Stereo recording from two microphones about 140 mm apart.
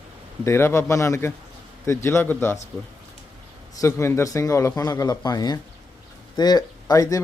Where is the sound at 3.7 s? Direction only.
20° left (ahead or behind).